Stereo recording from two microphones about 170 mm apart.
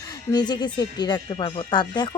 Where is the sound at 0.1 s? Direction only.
25° left (ahead or behind).